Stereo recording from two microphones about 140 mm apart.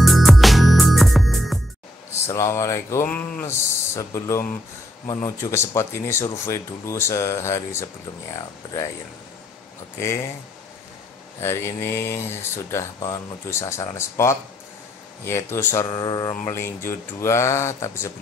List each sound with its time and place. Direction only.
0.0 s music: centre (ahead or behind)
2.2 s speech: 20° left (ahead or behind)
9.9 s speech: 20° left (ahead or behind)
11.4 s speech: 15° left (ahead or behind)
15.9 s speech: 30° left (ahead or behind)
16.5 s speech: 20° left (ahead or behind)